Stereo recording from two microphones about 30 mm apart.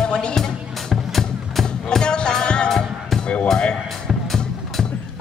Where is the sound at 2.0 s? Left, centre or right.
Left.